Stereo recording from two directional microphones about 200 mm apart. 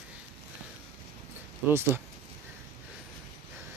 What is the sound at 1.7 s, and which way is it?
Speech, 10° right (ahead or behind).